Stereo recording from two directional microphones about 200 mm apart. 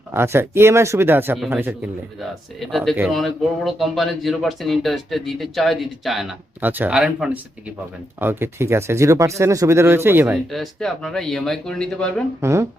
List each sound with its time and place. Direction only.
0.1 s speech: 10° right (ahead or behind)
10.5 s speech: centre (ahead or behind)
12.4 s speech: 15° right (ahead or behind)